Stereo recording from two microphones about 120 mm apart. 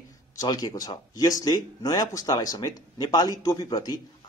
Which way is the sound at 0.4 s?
30° left (ahead or behind).